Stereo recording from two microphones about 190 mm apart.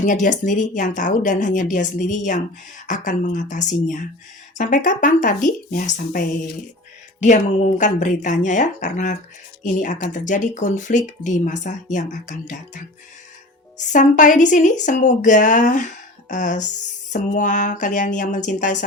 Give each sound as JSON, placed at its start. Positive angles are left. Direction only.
{"t": 0.0, "sound": "speech", "side_deg": 40}